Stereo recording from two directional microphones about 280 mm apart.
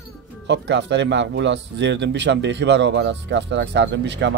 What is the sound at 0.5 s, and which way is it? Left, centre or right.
Speech, right.